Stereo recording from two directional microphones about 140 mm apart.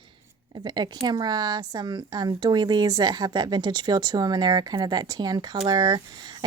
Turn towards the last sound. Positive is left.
turn(degrees=-30)  # may be behind; listen again after turning